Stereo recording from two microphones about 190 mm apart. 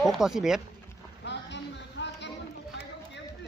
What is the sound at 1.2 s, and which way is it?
Music, 65° left (ahead or behind).